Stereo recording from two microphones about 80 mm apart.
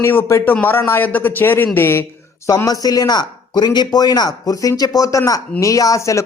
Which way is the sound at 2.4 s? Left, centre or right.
Left.